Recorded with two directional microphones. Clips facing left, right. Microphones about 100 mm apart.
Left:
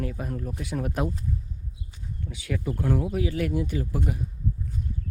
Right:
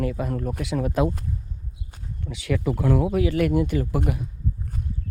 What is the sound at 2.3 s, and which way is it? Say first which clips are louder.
Speech: right 6 dB; 85° right.